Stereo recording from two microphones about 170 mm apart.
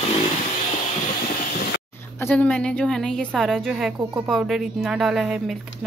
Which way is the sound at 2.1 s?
10° left (ahead or behind).